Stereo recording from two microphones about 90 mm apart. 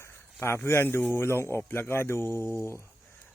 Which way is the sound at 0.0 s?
30° left (ahead or behind).